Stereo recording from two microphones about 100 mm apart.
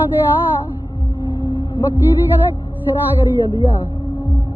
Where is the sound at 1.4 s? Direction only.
20° right (ahead or behind).